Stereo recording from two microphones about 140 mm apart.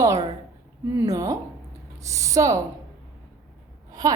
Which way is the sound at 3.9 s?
25° right (ahead or behind).